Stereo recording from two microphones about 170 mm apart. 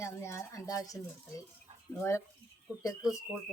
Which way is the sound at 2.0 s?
15° left (ahead or behind).